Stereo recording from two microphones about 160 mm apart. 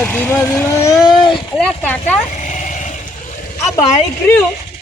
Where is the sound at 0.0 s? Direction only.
10° left (ahead or behind).